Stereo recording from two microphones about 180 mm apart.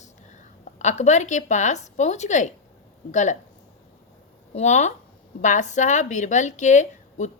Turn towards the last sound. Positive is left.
turn(degrees=40)  # may be behind; listen again after turning